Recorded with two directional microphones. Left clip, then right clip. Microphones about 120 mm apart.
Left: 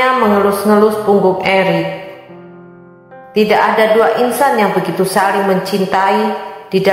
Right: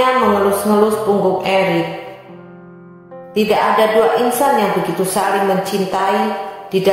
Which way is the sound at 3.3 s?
30° left (ahead or behind).